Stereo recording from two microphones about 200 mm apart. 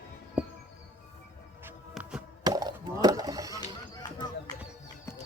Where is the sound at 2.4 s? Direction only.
20° right (ahead or behind).